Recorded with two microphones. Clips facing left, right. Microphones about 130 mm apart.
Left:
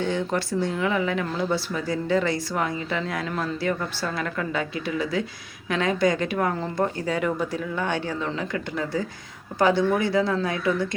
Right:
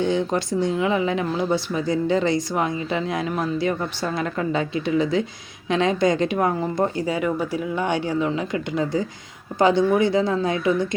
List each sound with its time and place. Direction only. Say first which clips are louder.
0.0 s speech: right 4 dB; 20° right (ahead or behind)